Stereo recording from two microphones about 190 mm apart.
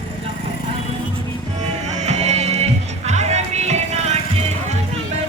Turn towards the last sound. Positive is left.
turn(degrees=-35)  # may be behind; listen again after turning